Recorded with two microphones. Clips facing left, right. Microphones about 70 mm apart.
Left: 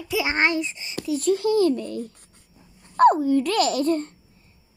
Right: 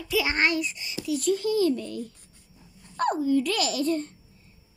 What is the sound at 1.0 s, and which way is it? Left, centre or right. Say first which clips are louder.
A child's voice: left 4 dB; left.